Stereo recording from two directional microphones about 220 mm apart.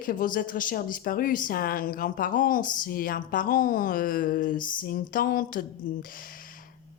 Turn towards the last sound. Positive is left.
turn(degrees=40)  # may be behind; listen again after turning